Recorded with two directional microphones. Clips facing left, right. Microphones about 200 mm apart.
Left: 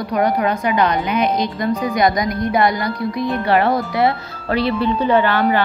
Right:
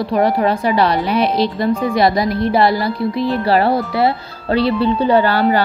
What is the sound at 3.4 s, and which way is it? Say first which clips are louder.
Speech: even; 35° right (ahead or behind).